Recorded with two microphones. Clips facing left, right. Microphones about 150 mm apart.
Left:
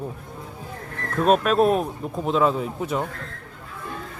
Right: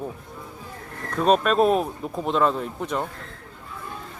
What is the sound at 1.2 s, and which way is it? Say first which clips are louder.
Speech: left 1 dB; centre (ahead or behind).